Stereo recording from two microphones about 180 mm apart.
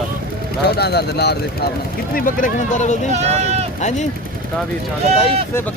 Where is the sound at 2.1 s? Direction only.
50° left (ahead or behind).